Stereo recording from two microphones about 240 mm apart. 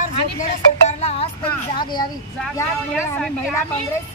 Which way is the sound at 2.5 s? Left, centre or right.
Centre.